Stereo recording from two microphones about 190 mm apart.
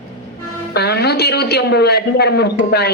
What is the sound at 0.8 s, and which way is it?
A man's voice, 60° left (ahead or behind).